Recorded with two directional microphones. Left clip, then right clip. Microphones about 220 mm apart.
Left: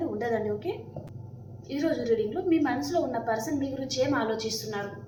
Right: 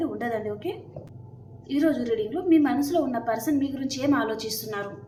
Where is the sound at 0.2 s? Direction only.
35° right (ahead or behind).